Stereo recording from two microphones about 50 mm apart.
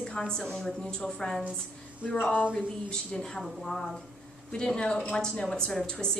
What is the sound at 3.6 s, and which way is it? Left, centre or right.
Speech, centre.